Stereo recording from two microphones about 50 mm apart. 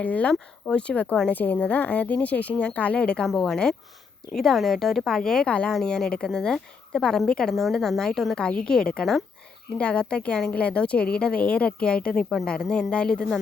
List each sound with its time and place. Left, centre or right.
0.0 s a woman's voice: left
3.2 s a woman's voice: centre
5.5 s a woman's voice: left
5.7 s a woman's voice: centre
8.4 s a woman's voice: centre